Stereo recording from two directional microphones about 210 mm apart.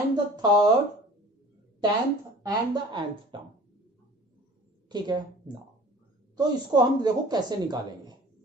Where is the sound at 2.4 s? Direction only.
20° right (ahead or behind).